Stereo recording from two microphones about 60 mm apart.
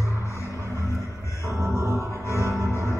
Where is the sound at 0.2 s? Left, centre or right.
Left.